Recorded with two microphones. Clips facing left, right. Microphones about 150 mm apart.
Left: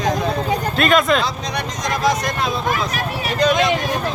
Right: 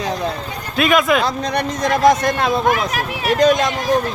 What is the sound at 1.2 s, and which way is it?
Speech, 55° right (ahead or behind).